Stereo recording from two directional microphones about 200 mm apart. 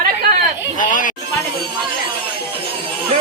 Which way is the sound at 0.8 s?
40° left (ahead or behind).